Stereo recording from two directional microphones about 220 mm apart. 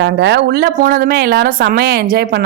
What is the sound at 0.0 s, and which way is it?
A woman's voice, 50° right (ahead or behind).